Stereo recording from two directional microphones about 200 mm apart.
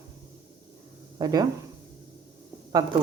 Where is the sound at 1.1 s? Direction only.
20° right (ahead or behind).